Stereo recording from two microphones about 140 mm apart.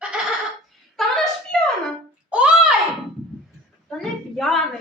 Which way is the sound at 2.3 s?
10° right (ahead or behind).